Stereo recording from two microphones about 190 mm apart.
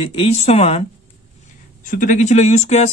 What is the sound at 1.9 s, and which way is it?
Speech, 45° left (ahead or behind).